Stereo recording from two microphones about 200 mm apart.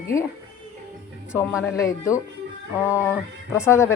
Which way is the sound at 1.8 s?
15° left (ahead or behind).